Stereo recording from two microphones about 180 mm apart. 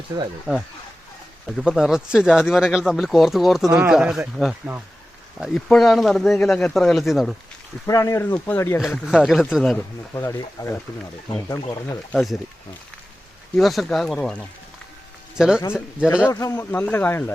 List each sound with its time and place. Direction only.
0.1 s speech: 20° right (ahead or behind)
1.5 s speech: centre (ahead or behind)
7.9 s speech: 15° left (ahead or behind)
8.8 s speech: 5° right (ahead or behind)
9.7 s speech: 15° left (ahead or behind)
12.1 s speech: centre (ahead or behind)
13.6 s speech: centre (ahead or behind)
16.3 s speech: 15° left (ahead or behind)